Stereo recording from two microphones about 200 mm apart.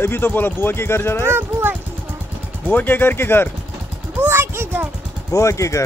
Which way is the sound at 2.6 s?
10° left (ahead or behind).